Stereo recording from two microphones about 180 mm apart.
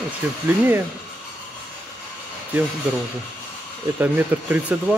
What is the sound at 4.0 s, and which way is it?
Speech, 10° right (ahead or behind).